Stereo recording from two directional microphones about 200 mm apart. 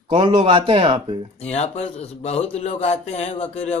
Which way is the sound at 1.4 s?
35° left (ahead or behind).